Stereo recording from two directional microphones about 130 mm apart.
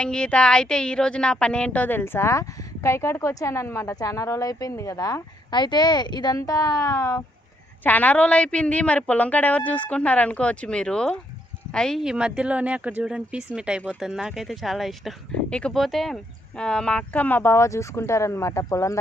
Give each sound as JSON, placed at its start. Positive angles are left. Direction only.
{"t": 0.0, "sound": "speech", "side_deg": 5}
{"t": 7.9, "sound": "a woman's voice", "side_deg": 10}